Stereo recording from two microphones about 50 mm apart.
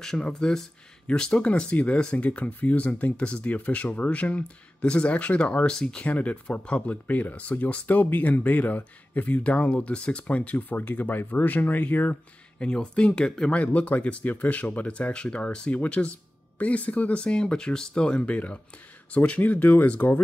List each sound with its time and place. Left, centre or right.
0.0 s speech: centre
5.7 s speech: centre
6.0 s speech: left
7.1 s speech: left
12.5 s speech: centre
13.6 s speech: left